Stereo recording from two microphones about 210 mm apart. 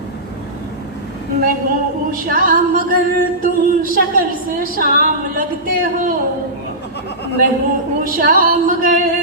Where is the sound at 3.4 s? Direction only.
40° right (ahead or behind).